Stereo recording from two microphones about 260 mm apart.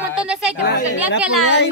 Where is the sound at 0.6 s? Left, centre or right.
Left.